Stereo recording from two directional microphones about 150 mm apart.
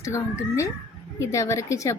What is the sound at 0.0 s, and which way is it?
Speech, 20° left (ahead or behind).